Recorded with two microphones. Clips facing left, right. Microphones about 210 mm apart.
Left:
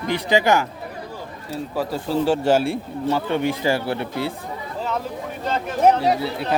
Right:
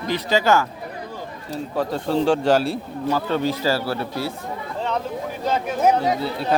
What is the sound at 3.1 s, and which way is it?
Speech, 15° left (ahead or behind).